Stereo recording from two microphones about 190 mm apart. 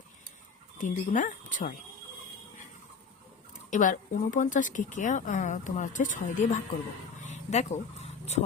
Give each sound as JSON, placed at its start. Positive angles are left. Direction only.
{"t": 0.8, "sound": "speech", "side_deg": 40}
{"t": 3.7, "sound": "speech", "side_deg": 45}
{"t": 7.2, "sound": "a sound", "side_deg": 40}